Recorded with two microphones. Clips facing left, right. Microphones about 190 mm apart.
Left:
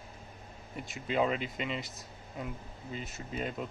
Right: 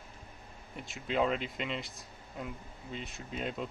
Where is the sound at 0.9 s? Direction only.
Centre (ahead or behind).